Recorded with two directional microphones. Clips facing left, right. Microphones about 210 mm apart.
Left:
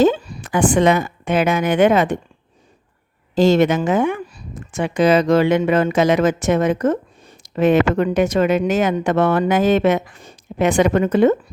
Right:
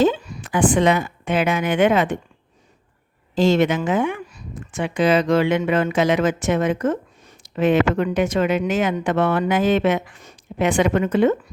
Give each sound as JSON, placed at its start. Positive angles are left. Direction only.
{"t": 0.0, "sound": "a woman's voice", "side_deg": 40}
{"t": 3.3, "sound": "speech", "side_deg": 40}